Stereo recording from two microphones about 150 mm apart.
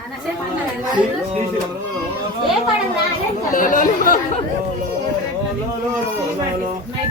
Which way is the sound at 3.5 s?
65° left (ahead or behind).